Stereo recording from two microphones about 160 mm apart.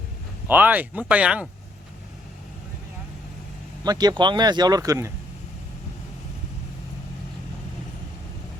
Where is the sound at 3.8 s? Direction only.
25° right (ahead or behind).